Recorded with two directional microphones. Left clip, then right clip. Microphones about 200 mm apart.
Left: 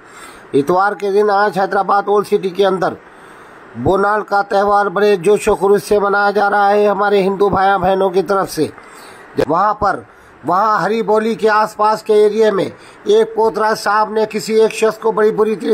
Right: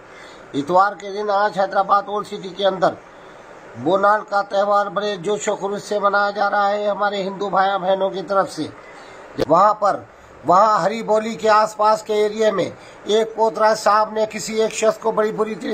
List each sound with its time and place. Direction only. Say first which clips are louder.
0.7 s speech: even; 25° left (ahead or behind)
9.5 s speech: right 1 dB; 20° left (ahead or behind)